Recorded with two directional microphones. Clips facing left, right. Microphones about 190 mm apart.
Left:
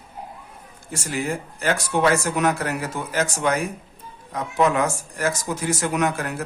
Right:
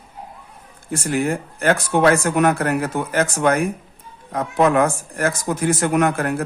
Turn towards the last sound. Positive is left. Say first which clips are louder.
# right 5 dB
turn(degrees=-55)  # may be behind; listen again after turning